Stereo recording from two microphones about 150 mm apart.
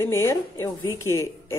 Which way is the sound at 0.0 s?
15° left (ahead or behind).